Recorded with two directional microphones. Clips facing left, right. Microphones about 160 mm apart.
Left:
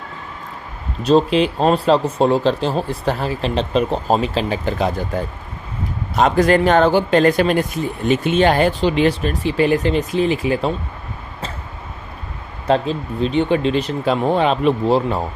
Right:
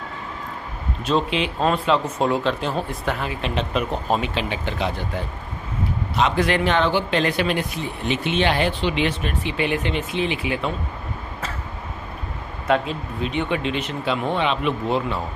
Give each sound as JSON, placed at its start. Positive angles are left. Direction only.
{"t": 1.0, "sound": "speech", "side_deg": 40}
{"t": 12.6, "sound": "speech", "side_deg": 30}